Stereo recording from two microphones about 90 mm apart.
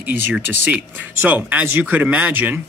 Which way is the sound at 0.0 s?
15° right (ahead or behind).